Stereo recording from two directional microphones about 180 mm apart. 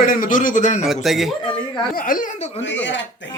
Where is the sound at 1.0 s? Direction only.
Centre (ahead or behind).